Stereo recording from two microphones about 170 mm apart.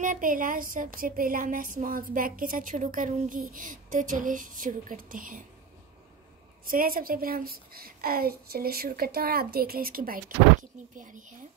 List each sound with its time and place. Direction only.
0.0 s a woman's voice: 50° right (ahead or behind)
6.6 s a woman's voice: 55° right (ahead or behind)